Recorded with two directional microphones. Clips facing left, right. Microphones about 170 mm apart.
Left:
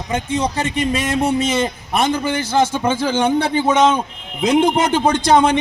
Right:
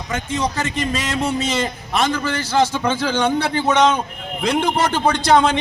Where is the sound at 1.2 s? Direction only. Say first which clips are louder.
Left 4 dB; 55° left (ahead or behind).